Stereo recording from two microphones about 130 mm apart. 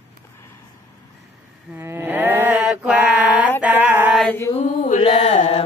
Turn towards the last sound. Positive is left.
turn(degrees=45)  # may be behind; listen again after turning